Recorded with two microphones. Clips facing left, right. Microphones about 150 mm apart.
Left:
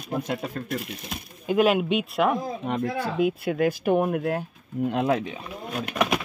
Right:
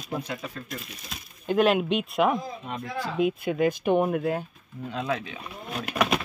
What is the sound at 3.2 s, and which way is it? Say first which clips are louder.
Speech: even; centre (ahead or behind).